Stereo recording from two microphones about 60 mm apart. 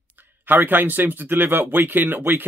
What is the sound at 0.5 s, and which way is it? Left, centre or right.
Speech, right.